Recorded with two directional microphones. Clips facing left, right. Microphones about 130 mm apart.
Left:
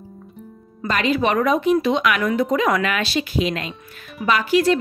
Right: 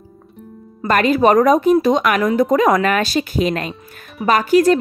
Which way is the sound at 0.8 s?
50° right (ahead or behind).